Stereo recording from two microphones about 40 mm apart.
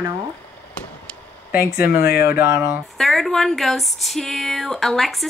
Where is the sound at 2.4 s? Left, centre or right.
Right.